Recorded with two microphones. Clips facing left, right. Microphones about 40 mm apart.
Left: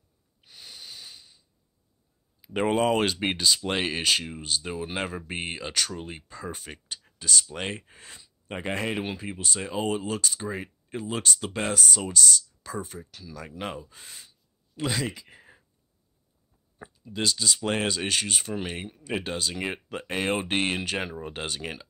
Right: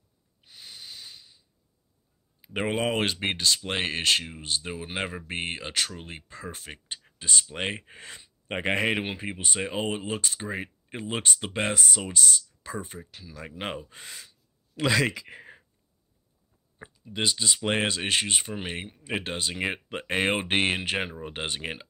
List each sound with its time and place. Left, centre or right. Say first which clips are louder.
0.4 s snort: even; centre
2.4 s speech: left 4 dB; centre
3.2 s speech: left 1 dB; centre
6.9 s speech: left 1 dB; right
7.8 s speech: right 4 dB; right
14.8 s speech: right 5 dB; right
16.7 s speech: even; right